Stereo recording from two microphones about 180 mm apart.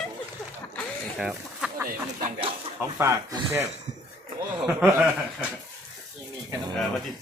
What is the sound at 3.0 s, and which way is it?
Speech, 15° right (ahead or behind).